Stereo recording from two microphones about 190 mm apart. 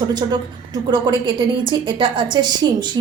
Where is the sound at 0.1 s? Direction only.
20° right (ahead or behind).